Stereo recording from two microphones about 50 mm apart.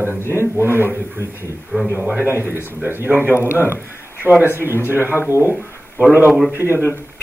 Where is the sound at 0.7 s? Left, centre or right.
Right.